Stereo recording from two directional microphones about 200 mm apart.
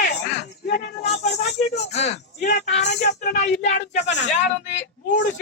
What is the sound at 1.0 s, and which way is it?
Rattle, 35° left (ahead or behind).